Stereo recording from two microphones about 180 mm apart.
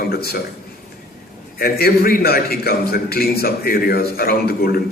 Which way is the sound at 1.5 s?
60° left (ahead or behind).